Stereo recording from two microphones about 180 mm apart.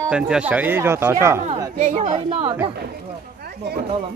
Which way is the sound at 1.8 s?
40° right (ahead or behind).